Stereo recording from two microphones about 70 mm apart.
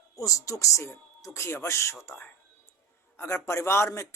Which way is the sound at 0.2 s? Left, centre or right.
Left.